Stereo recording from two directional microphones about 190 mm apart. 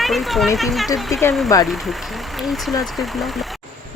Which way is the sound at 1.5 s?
20° left (ahead or behind).